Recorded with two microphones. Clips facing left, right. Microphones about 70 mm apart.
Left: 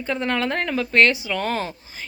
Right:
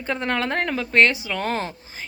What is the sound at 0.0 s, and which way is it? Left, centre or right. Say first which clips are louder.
A woman's voice: left 1 dB; right.